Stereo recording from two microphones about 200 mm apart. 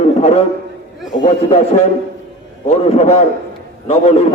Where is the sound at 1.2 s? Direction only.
30° left (ahead or behind).